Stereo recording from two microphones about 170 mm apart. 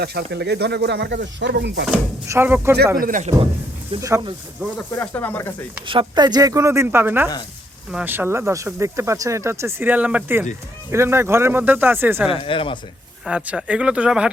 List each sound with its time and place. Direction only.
0.0 s speech: 75° right (ahead or behind); by 1.8 s 90° right
2.2 s speech: 15° right (ahead or behind)
3.0 s a man's voice: 50° right (ahead or behind)
4.6 s speech: 10° right (ahead or behind)
4.9 s speech: 10° left (ahead or behind)
5.9 s speech: 25° right (ahead or behind); by 12.3 s 10° right (ahead or behind)
12.3 s speech: 30° left (ahead or behind)
13.2 s speech: 5° right (ahead or behind)